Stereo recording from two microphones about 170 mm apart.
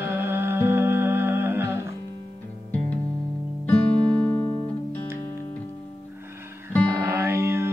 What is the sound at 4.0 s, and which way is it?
Music, 30° right (ahead or behind).